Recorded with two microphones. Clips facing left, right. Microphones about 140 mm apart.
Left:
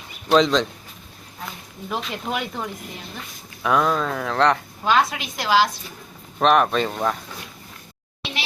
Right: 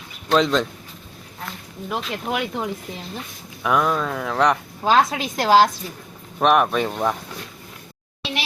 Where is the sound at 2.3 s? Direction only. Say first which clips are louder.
Right 2 dB; 5° right (ahead or behind).